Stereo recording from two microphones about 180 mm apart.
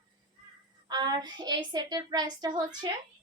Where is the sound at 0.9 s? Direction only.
25° right (ahead or behind).